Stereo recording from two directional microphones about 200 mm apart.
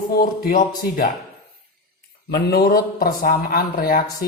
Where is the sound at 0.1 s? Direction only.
45° left (ahead or behind).